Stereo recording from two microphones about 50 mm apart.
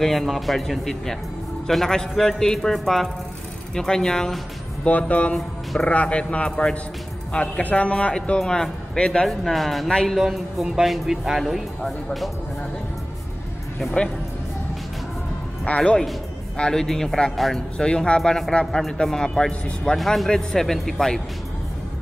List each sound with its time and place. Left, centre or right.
0.0 s a man's voice: centre
4.8 s a man's voice: left
9.3 s a man's voice: centre
15.6 s a man's voice: left
16.8 s a man's voice: centre
17.7 s a man's voice: centre
18.8 s a man's voice: centre